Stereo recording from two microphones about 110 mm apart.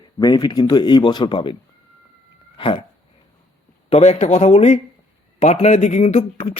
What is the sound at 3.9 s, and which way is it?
Speech, 85° left.